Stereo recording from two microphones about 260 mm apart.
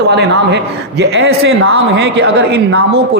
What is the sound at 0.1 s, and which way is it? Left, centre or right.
A man's voice, right.